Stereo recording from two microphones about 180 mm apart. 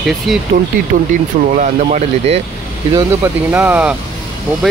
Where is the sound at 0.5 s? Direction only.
45° right (ahead or behind).